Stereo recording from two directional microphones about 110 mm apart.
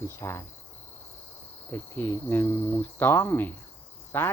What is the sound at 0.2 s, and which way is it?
Speech, 25° left (ahead or behind).